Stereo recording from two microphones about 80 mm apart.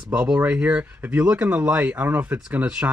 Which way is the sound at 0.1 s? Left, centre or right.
Centre.